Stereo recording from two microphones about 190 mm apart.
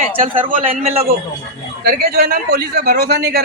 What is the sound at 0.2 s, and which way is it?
Speech, 25° right (ahead or behind).